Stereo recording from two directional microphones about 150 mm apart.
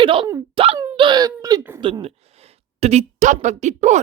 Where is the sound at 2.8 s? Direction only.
50° right (ahead or behind).